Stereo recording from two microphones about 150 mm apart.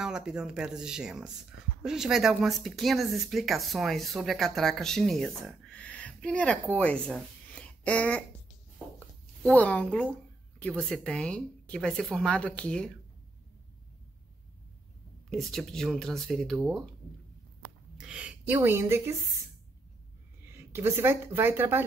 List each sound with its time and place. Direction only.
0.0 s a woman's voice: 5° right (ahead or behind)
7.6 s a sound: 10° left (ahead or behind)
9.5 s a woman's voice: 10° left (ahead or behind)
15.2 s speech: centre (ahead or behind)
17.9 s a woman's voice: 5° right (ahead or behind)
20.4 s speech: 15° right (ahead or behind)